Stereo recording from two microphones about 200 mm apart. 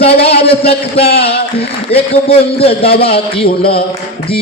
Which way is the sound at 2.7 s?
50° left (ahead or behind).